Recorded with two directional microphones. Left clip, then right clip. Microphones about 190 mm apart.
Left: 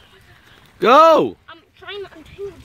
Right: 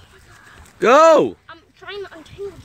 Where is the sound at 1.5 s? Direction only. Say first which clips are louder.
Even; 60° left (ahead or behind).